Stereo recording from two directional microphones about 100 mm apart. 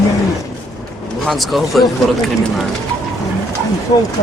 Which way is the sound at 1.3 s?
Centre (ahead or behind).